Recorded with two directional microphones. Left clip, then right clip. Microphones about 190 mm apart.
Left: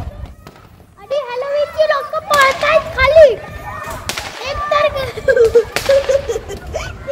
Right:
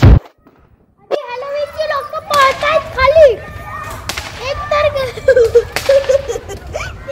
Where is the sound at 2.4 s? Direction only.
15° right (ahead or behind).